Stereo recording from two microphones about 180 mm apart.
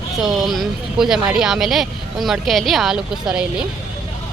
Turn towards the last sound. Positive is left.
turn(degrees=-5)  # may be behind; listen again after turning